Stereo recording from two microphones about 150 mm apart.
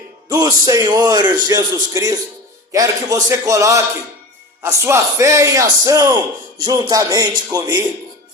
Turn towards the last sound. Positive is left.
turn(degrees=-25)  # may be behind; listen again after turning